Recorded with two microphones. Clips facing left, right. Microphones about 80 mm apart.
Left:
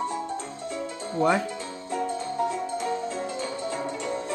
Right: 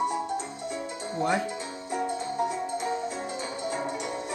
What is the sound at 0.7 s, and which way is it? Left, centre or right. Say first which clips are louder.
Music: left 1 dB; centre.